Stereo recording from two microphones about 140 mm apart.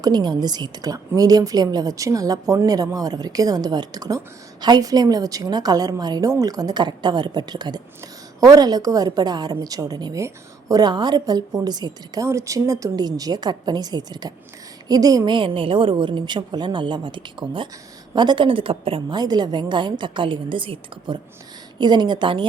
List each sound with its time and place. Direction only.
0.0 s a woman's voice: 30° right (ahead or behind)